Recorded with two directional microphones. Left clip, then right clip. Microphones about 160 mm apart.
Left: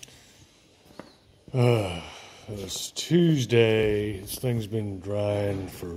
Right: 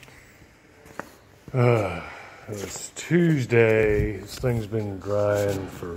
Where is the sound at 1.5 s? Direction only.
15° left (ahead or behind).